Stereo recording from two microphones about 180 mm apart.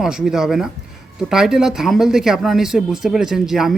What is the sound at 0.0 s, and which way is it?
Speech, 5° right (ahead or behind).